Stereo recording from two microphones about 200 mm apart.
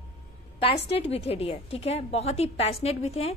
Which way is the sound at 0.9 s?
30° left (ahead or behind).